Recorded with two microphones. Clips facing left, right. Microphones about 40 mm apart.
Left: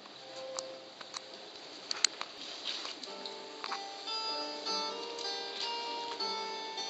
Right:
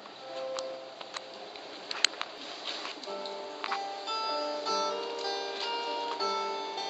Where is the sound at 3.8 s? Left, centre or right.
Centre.